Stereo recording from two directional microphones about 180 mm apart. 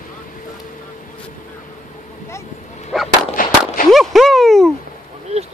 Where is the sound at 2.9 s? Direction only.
Centre (ahead or behind).